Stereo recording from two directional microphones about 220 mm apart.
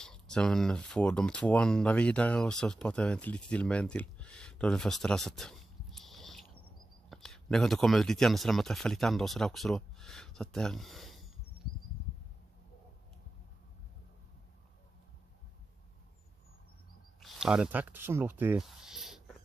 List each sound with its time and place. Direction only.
0.0 s speech: 5° left (ahead or behind)
17.2 s speech: 5° right (ahead or behind)